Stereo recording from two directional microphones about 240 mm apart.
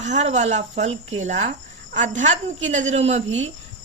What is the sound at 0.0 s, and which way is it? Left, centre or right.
A woman's voice, right.